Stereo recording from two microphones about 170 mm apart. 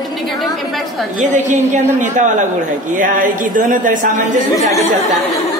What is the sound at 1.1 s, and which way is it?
A woman's voice, 45° right (ahead or behind).